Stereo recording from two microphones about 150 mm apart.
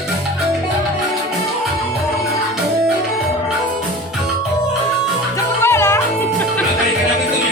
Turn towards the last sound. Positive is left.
turn(degrees=15)  # may be behind; listen again after turning